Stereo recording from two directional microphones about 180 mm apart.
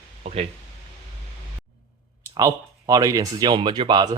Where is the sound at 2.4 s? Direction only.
20° right (ahead or behind).